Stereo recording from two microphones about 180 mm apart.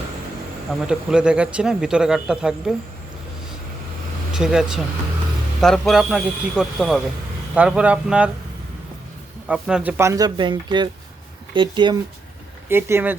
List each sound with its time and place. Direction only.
0.7 s speech: 5° right (ahead or behind)
4.4 s speech: 5° right (ahead or behind)
9.5 s speech: 5° right (ahead or behind)
10.0 s speech: 20° right (ahead or behind)
12.6 s speech: 10° right (ahead or behind)